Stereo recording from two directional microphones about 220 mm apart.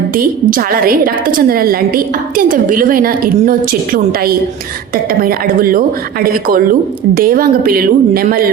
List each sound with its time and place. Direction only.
0.2 s a woman's voice: 40° right (ahead or behind)